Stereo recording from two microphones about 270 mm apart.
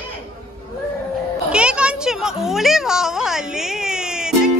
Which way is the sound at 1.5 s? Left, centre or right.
Centre.